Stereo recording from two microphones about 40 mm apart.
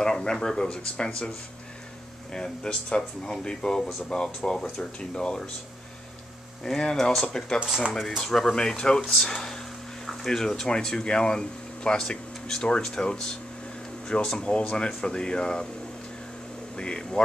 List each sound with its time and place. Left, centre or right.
0.0 s speech: centre
2.3 s speech: centre
6.6 s speech: centre
14.4 s speech: left
16.7 s speech: left